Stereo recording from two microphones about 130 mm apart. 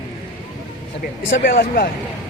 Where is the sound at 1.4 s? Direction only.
90° left.